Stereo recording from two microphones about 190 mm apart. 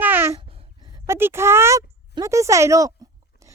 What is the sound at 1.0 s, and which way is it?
A woman's voice, 15° right (ahead or behind).